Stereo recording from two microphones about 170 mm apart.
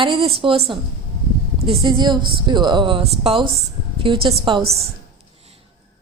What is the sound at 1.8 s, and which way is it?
A woman's voice, 25° right (ahead or behind).